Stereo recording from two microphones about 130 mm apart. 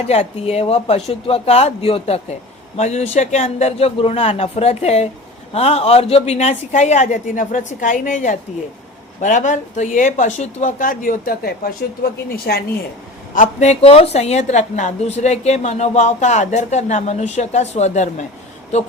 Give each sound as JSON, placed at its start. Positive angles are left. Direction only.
{"t": 0.1, "sound": "a woman's voice", "side_deg": 55}
{"t": 13.3, "sound": "a woman's voice", "side_deg": 75}